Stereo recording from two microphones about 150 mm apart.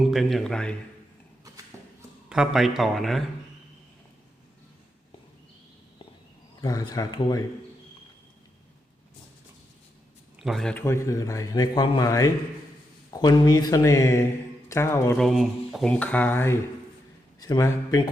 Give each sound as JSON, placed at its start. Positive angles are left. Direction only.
{"t": 0.0, "sound": "speech", "side_deg": 0}
{"t": 2.3, "sound": "speech", "side_deg": -5}
{"t": 6.6, "sound": "speech", "side_deg": 25}
{"t": 10.3, "sound": "speech", "side_deg": 0}
{"t": 10.8, "sound": "speech", "side_deg": 20}
{"t": 15.2, "sound": "speech", "side_deg": 0}